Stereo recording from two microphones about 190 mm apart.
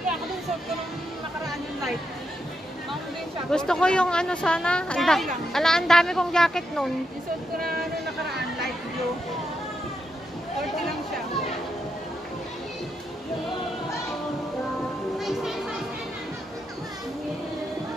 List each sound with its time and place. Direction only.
3.4 s speech: 5° left (ahead or behind)
15.1 s music: centre (ahead or behind)